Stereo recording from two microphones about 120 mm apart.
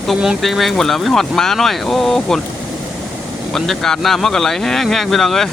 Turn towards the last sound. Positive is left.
turn(degrees=5)  # may be behind; listen again after turning